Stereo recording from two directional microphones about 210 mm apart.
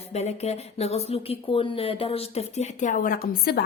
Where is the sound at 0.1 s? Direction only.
30° left (ahead or behind).